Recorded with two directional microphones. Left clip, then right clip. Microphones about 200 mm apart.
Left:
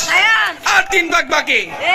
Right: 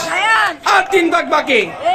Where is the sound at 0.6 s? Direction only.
Centre (ahead or behind).